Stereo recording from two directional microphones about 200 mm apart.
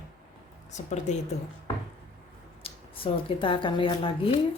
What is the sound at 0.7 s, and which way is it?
Speech, 35° left (ahead or behind).